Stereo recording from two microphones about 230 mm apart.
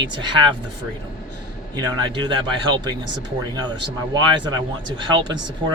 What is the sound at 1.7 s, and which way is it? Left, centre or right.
Speech, centre.